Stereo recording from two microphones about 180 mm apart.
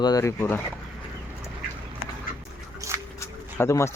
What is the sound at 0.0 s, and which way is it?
Speech, 20° left (ahead or behind).